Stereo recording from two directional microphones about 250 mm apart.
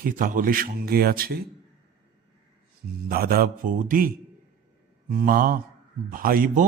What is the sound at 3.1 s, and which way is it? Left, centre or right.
A man's voice, right.